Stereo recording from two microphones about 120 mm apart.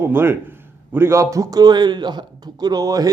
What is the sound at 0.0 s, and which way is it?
Speech, 20° right (ahead or behind).